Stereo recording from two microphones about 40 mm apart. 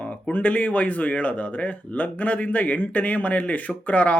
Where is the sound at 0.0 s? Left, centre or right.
Left.